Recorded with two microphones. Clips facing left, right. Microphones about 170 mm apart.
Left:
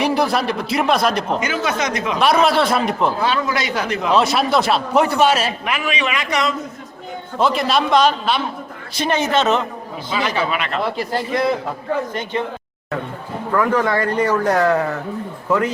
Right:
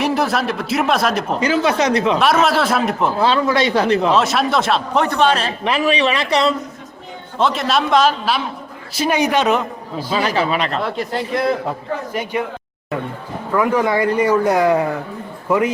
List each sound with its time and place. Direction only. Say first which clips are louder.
0.0 s a man's voice: even; centre (ahead or behind)
1.4 s speech: right 5 dB; 30° right (ahead or behind)
2.1 s a man's voice: even; centre (ahead or behind)
3.2 s speech: right 4 dB; 30° right (ahead or behind)
4.1 s a man's voice: even; centre (ahead or behind)
5.6 s speech: right 5 dB; 35° right (ahead or behind)
7.3 s a man's voice: even; centre (ahead or behind)
10.3 s speech: right 3 dB; 35° right (ahead or behind)
10.8 s a man's voice: even; centre (ahead or behind)
13.6 s a man's voice: right 2 dB; 10° right (ahead or behind)